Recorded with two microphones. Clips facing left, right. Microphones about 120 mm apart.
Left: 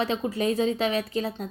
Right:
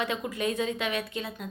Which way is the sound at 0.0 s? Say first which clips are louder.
Left 4 dB; 35° left (ahead or behind).